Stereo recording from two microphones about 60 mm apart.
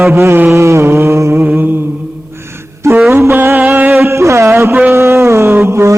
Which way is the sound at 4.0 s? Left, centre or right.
Right.